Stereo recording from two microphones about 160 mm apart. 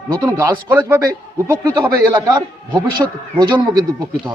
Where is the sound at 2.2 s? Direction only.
25° right (ahead or behind).